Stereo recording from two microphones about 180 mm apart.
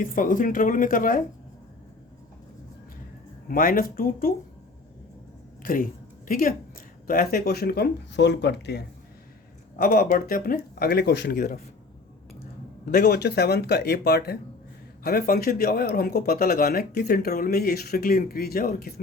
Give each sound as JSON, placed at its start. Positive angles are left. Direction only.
{"t": 0.0, "sound": "speech", "side_deg": 50}
{"t": 3.5, "sound": "speech", "side_deg": 50}
{"t": 5.6, "sound": "speech", "side_deg": 50}
{"t": 9.7, "sound": "speech", "side_deg": 55}
{"t": 12.8, "sound": "speech", "side_deg": 55}